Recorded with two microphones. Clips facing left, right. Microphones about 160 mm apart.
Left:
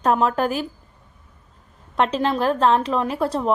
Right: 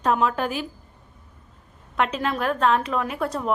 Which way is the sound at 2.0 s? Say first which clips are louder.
Left 4 dB; 30° left (ahead or behind).